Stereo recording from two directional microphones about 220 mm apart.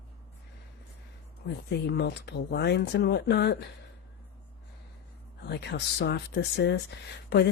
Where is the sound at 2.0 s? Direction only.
50° left (ahead or behind).